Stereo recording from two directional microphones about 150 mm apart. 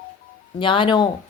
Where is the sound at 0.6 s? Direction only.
35° left (ahead or behind).